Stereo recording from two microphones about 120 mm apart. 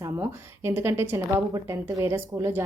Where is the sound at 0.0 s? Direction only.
20° right (ahead or behind).